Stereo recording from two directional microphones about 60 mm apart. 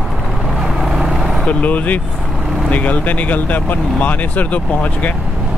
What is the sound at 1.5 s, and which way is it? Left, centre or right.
Speech, left.